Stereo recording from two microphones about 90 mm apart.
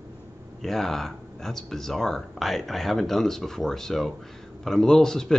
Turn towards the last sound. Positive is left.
turn(degrees=5)  # may be behind; listen again after turning